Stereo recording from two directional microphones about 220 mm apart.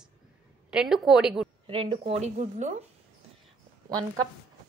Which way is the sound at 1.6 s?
25° right (ahead or behind).